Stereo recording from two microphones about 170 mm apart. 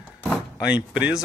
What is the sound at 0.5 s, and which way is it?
Speech, 5° right (ahead or behind).